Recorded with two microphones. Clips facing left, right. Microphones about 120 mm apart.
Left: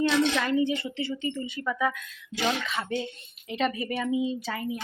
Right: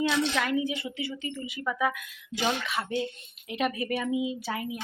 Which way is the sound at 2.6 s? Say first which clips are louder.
Even; 5° right (ahead or behind).